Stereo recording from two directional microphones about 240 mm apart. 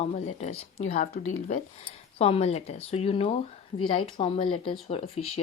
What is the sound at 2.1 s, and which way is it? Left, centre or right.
Speech, left.